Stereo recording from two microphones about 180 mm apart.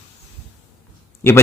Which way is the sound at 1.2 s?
15° left (ahead or behind).